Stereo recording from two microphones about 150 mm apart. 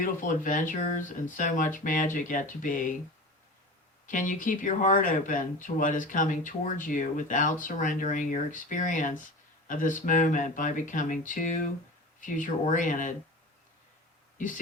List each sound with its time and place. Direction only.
0.0 s speech: 65° left (ahead or behind)
4.0 s speech: 60° left (ahead or behind)